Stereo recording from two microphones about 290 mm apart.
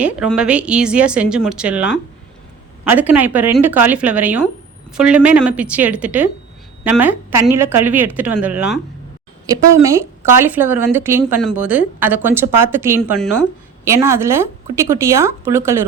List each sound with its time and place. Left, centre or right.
0.0 s speech: centre
13.8 s speech: centre